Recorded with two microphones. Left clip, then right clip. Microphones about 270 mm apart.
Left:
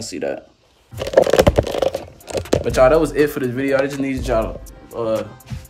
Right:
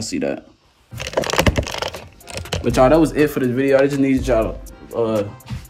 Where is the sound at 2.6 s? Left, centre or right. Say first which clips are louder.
Right 1 dB; centre.